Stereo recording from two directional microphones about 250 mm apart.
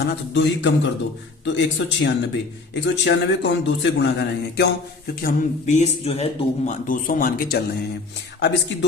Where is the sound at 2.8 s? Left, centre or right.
Left.